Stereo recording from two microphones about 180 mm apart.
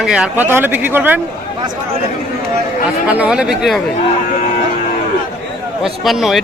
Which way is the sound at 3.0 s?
5° right (ahead or behind).